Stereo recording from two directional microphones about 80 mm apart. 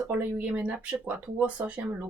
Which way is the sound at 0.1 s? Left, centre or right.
Right.